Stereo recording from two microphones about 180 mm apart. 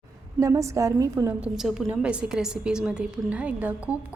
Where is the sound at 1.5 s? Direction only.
5° right (ahead or behind).